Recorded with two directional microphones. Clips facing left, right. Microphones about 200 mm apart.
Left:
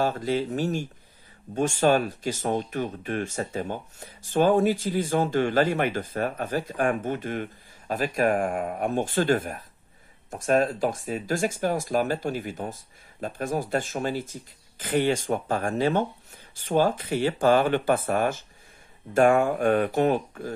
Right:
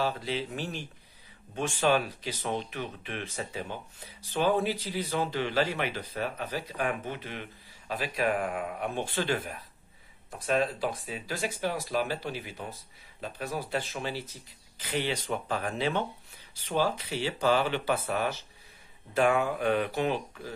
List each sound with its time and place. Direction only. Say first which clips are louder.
0.0 s speech: left 6 dB; 45° left (ahead or behind)